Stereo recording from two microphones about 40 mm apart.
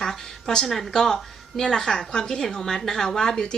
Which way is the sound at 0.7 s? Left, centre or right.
Centre.